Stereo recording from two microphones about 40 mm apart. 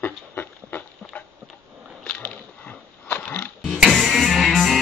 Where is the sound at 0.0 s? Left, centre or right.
Left.